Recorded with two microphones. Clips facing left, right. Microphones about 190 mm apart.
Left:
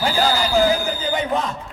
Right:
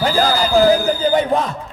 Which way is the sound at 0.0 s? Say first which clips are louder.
Right 3 dB; 35° right (ahead or behind).